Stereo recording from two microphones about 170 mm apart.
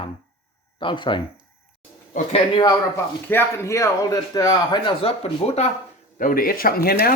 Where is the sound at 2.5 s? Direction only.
20° left (ahead or behind); by 5.7 s 40° left (ahead or behind).